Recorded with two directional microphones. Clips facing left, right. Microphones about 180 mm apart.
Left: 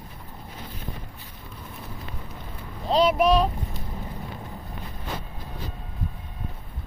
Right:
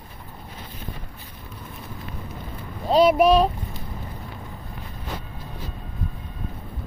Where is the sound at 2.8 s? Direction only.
10° right (ahead or behind).